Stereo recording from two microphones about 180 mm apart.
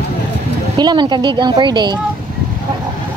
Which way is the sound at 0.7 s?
25° right (ahead or behind).